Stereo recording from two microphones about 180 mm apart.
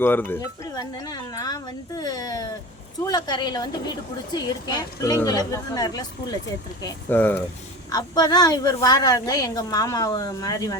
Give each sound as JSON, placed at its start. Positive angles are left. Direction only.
{"t": 0.0, "sound": "a woman's voice", "side_deg": 10}
{"t": 7.1, "sound": "speech", "side_deg": 10}
{"t": 7.9, "sound": "a woman's voice", "side_deg": 20}